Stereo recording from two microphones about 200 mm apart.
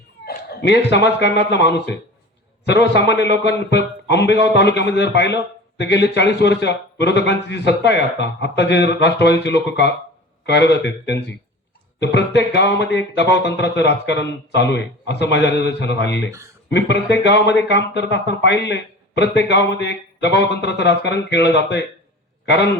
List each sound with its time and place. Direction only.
0.3 s a man's voice: 60° left (ahead or behind)